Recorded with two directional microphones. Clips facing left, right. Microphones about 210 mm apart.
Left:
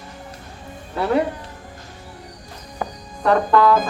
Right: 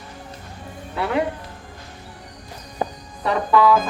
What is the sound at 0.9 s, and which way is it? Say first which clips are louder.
Speech: left 3 dB; 35° left (ahead or behind).